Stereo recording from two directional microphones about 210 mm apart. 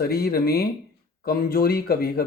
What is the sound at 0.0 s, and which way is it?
Speech, 45° left (ahead or behind).